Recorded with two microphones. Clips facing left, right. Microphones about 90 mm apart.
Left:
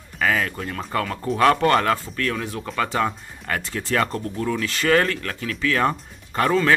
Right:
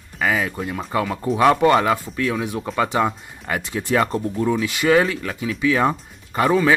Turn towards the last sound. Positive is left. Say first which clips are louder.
# right 2 dB
turn(degrees=-10)  # may be behind; listen again after turning